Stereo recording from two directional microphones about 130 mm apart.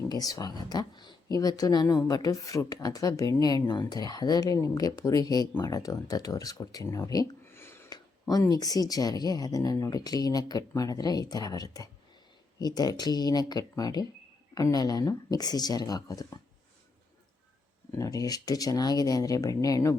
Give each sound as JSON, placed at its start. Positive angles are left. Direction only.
{"t": 0.1, "sound": "speech", "side_deg": 30}
{"t": 7.5, "sound": "a sound", "side_deg": 20}
{"t": 7.9, "sound": "speech", "side_deg": 30}
{"t": 17.9, "sound": "speech", "side_deg": 25}